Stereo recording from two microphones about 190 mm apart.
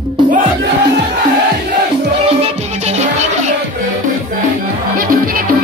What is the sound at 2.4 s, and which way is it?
Music, 35° right (ahead or behind).